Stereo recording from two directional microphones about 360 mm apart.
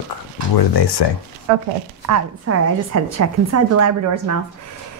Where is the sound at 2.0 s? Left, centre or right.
Right.